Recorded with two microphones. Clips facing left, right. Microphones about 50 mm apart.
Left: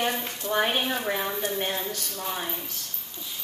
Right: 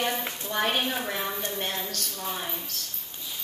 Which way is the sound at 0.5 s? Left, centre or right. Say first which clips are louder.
Left 2 dB; centre.